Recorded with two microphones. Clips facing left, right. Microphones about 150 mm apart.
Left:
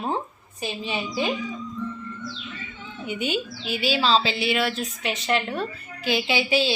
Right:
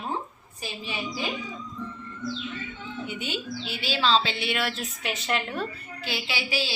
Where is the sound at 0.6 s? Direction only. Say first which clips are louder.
Left 6 dB; 20° left (ahead or behind).